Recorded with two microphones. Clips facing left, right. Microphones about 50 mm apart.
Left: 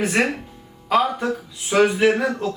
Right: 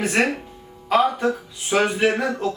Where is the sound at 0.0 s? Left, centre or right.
Centre.